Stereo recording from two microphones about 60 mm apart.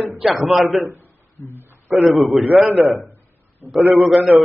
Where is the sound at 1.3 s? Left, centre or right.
Left.